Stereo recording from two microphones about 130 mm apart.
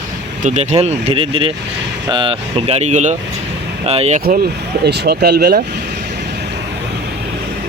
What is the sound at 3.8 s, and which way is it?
Speech, 55° right (ahead or behind).